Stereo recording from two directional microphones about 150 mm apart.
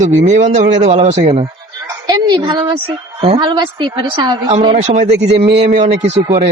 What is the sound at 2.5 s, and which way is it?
Speech, 30° right (ahead or behind).